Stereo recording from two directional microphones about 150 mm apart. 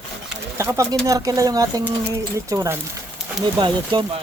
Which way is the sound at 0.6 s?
20° right (ahead or behind).